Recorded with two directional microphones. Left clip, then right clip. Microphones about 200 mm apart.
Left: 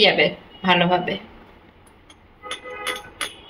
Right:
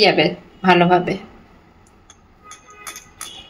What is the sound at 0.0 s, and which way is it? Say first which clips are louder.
Speech: right 2 dB; 40° right (ahead or behind).